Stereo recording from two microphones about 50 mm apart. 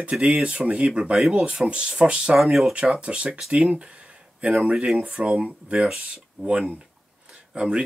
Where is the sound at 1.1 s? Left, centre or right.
Centre.